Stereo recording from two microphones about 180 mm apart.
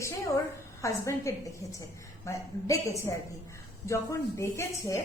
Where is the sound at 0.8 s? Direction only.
15° left (ahead or behind).